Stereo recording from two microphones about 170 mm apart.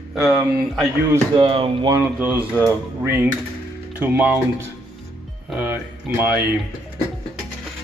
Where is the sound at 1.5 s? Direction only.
35° right (ahead or behind).